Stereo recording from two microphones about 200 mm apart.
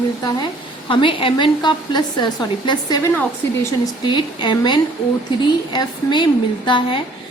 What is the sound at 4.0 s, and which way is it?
A woman's voice, 25° left (ahead or behind).